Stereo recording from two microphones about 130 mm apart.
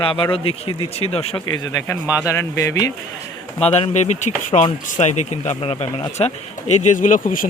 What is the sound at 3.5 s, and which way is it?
Speech, 55° left (ahead or behind).